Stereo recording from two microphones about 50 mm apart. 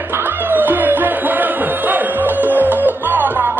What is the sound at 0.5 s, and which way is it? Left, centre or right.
Music, right.